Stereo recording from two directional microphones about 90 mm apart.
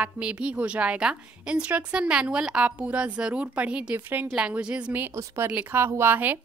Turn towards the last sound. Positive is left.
turn(degrees=-20)  # may be behind; listen again after turning